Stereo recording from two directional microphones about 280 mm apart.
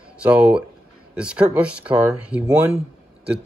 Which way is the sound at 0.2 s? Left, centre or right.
Centre.